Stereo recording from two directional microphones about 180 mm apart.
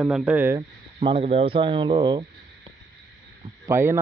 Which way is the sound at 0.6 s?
30° right (ahead or behind).